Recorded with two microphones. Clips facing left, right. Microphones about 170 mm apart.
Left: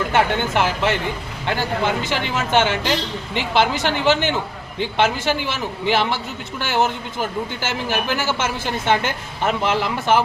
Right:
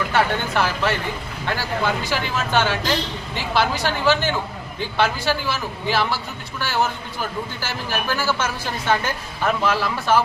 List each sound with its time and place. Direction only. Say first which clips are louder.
0.1 s a man's voice: left 2 dB; 20° left (ahead or behind)